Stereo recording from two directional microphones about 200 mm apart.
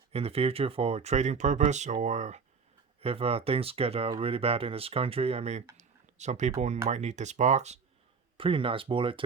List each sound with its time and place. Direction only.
0.1 s speech: 30° right (ahead or behind)
5.7 s a sound: 35° right (ahead or behind)
6.8 s speech: 35° right (ahead or behind)